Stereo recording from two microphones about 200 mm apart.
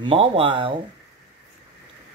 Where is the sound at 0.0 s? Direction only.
25° right (ahead or behind).